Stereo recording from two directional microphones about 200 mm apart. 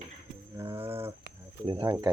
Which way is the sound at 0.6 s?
15° right (ahead or behind).